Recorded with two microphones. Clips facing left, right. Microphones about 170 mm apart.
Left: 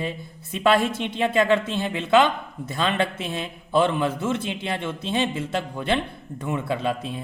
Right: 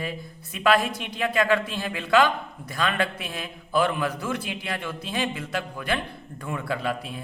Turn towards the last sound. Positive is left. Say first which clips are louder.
# left 3 dB
turn(degrees=25)  # may be behind; listen again after turning